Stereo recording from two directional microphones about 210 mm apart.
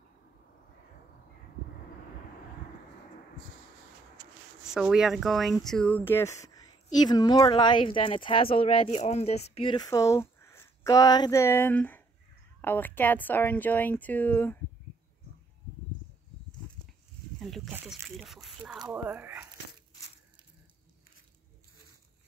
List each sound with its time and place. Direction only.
4.7 s speech: 5° right (ahead or behind)
17.4 s speech: centre (ahead or behind)